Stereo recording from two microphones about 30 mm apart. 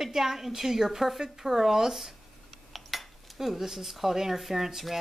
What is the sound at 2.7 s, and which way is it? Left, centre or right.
Cutlery, centre.